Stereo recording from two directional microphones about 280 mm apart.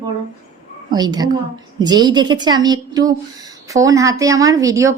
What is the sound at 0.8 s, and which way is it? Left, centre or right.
A woman's voice, centre.